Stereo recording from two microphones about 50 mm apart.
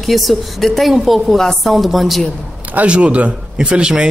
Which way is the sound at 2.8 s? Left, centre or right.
Right.